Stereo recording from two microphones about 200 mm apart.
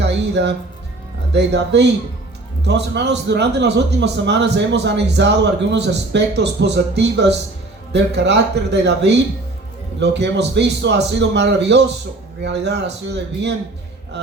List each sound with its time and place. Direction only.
0.0 s a man's voice: 60° right (ahead or behind)